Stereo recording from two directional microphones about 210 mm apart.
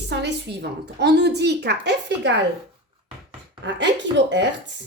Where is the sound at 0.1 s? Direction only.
55° right (ahead or behind).